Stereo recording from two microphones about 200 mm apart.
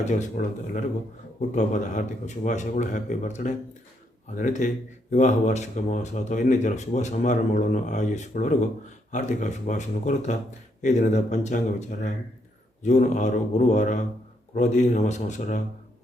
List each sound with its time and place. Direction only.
0.0 s speech: 35° left (ahead or behind)